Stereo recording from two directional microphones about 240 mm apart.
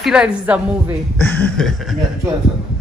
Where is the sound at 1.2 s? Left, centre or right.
Centre.